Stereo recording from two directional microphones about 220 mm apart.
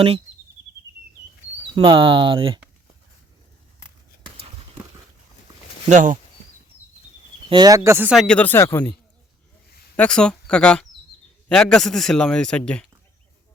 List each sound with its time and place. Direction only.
1.7 s speech: 20° right (ahead or behind)
5.9 s speech: 35° right (ahead or behind)
7.5 s speech: 20° right (ahead or behind)
7.9 s a man's voice: 10° right (ahead or behind)